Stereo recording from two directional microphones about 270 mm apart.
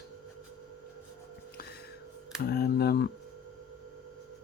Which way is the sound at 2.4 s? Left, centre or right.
Left.